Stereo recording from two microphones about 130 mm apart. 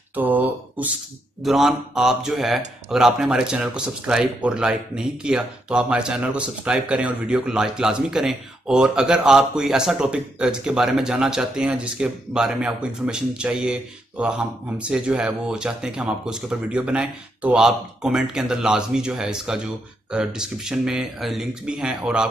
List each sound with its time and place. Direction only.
0.1 s mantra: 15° right (ahead or behind)
1.4 s speech: centre (ahead or behind)